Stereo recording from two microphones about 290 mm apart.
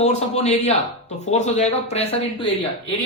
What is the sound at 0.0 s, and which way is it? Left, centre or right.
A man's voice, left.